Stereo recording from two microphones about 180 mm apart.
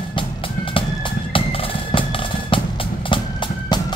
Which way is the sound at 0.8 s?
30° left (ahead or behind).